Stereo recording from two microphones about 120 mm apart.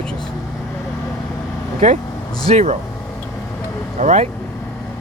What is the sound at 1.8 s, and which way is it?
Speech, 80° right.